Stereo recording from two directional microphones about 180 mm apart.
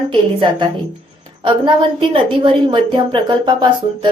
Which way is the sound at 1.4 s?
25° right (ahead or behind).